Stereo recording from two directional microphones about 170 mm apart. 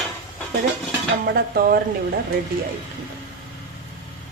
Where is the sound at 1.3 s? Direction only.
65° right (ahead or behind).